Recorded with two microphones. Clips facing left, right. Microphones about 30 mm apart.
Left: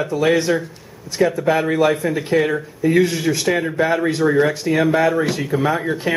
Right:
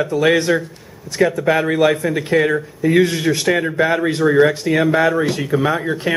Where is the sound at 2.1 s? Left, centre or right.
Centre.